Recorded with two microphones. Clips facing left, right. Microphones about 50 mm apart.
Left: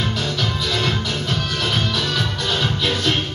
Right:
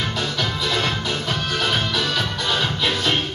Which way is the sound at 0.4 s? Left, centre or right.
Centre.